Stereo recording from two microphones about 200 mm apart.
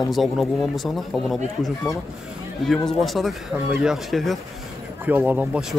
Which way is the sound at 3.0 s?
Centre (ahead or behind).